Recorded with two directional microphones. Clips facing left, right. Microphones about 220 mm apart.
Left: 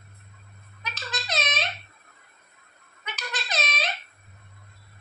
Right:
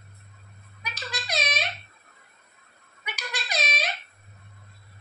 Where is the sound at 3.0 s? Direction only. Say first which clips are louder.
Left 1 dB; 10° right (ahead or behind).